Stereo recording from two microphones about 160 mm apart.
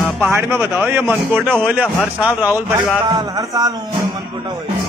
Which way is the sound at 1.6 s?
5° right (ahead or behind).